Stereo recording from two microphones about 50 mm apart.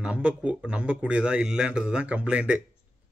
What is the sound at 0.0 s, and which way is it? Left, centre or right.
A man's voice, right.